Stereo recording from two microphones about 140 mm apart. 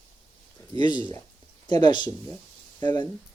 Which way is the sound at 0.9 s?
35° right (ahead or behind).